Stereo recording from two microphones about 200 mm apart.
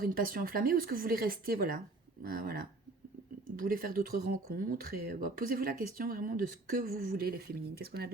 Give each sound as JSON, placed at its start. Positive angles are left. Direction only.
{"t": 0.0, "sound": "speech", "side_deg": -45}